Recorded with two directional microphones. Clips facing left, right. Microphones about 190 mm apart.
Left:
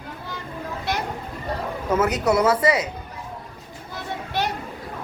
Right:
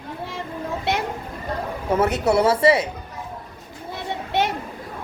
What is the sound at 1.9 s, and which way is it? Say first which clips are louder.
Speech: right 1 dB; 30° right (ahead or behind).